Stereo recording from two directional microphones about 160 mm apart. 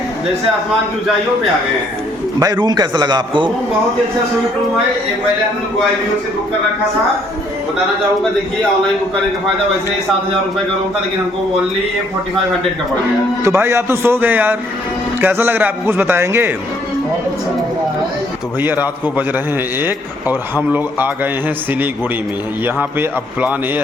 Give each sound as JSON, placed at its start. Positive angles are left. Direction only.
{"t": 2.4, "sound": "a man's voice", "side_deg": -25}
{"t": 13.4, "sound": "a man's voice", "side_deg": -15}
{"t": 18.6, "sound": "a man's voice", "side_deg": -10}
{"t": 22.6, "sound": "a man's voice", "side_deg": -10}